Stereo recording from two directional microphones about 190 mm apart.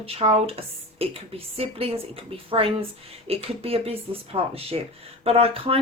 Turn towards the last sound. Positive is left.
turn(degrees=-30)  # may be behind; listen again after turning